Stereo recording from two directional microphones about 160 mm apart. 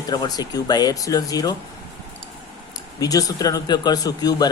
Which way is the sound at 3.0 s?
20° left (ahead or behind).